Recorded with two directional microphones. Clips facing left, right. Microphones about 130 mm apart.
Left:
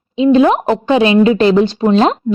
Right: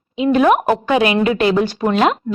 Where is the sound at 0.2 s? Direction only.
25° left (ahead or behind).